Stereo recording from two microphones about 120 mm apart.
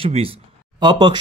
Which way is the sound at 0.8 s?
40° right (ahead or behind).